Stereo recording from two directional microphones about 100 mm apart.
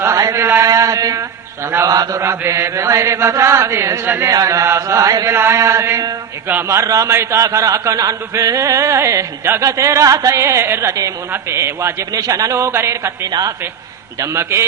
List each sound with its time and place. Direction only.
0.0 s mantra: 30° right (ahead or behind)
1.9 s chant: 35° right (ahead or behind)
6.5 s speech: 25° right (ahead or behind)
11.3 s chant: 30° right (ahead or behind)
14.2 s chant: 25° right (ahead or behind)